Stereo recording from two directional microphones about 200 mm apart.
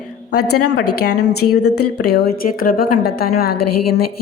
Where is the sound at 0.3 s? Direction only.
90° left.